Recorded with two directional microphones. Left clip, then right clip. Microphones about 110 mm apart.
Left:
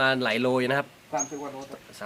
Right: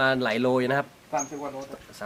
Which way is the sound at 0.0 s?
Centre (ahead or behind).